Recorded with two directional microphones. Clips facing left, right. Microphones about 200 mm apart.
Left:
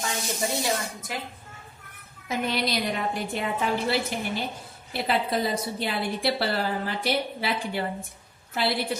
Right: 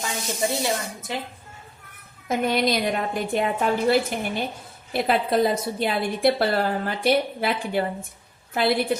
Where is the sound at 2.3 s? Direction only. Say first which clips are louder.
Right 5 dB; 50° right (ahead or behind).